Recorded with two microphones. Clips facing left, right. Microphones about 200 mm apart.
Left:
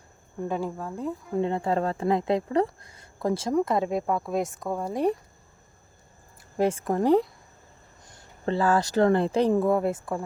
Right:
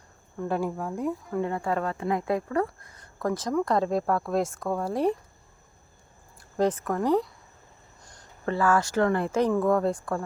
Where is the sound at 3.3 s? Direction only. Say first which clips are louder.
Left 2 dB; 30° left (ahead or behind).